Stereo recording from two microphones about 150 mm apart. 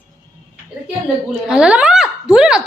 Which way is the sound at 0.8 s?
5° right (ahead or behind).